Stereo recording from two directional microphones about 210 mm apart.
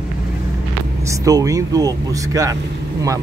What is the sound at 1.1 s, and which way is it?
Speech, 15° right (ahead or behind).